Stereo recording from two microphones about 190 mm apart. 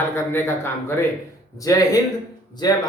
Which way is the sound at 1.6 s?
20° left (ahead or behind).